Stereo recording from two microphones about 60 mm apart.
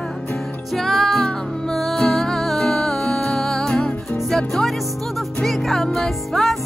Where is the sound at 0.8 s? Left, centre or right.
Centre.